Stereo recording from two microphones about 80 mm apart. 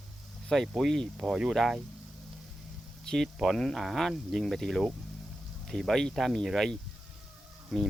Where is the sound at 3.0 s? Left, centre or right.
Centre.